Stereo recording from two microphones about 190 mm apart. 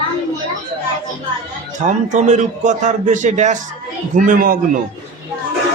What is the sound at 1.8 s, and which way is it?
A man's voice, 40° right (ahead or behind).